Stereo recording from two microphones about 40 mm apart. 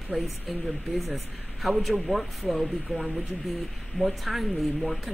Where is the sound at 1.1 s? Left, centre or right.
Centre.